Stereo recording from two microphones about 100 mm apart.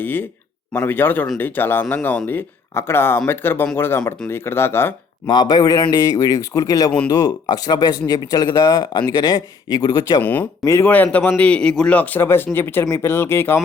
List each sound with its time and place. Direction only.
0.0 s speech: 20° left (ahead or behind)
5.3 s speech: 45° left (ahead or behind); by 10.8 s 30° left (ahead or behind)
10.8 s a man's voice: 15° left (ahead or behind)